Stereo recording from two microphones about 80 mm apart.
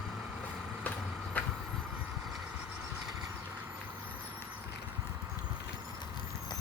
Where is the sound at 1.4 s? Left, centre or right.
Centre.